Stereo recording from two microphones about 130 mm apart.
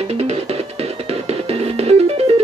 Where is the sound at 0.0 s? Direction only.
55° right (ahead or behind).